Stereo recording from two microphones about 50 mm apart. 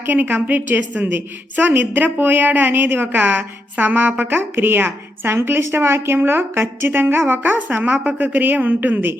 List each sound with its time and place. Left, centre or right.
0.0 s speech: right